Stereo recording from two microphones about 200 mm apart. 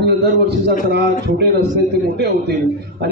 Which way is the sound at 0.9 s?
55° right (ahead or behind).